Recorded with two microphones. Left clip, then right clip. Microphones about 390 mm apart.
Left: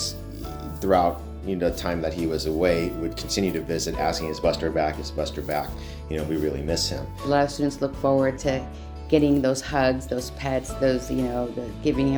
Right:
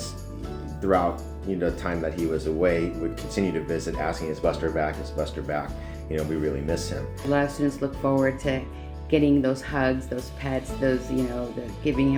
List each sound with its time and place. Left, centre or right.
0.8 s speech: left